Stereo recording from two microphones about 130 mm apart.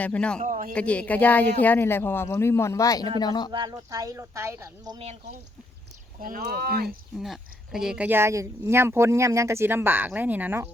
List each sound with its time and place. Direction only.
0.0 s speech: 10° left (ahead or behind)
0.3 s a man's voice: 75° right (ahead or behind)
0.7 s speech: 10° left (ahead or behind); by 3.5 s 35° left (ahead or behind)
3.7 s speech: 25° right (ahead or behind)
6.8 s speech: centre (ahead or behind)